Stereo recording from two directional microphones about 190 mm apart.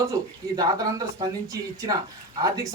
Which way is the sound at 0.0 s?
20° right (ahead or behind).